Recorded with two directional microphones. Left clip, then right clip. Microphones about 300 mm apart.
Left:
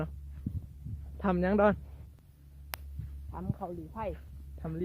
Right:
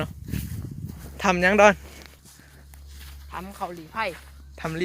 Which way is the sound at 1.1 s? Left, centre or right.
Centre.